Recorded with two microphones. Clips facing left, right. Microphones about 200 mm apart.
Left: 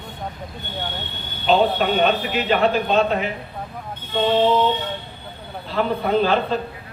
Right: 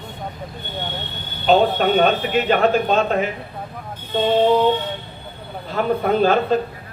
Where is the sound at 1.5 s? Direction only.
45° right (ahead or behind).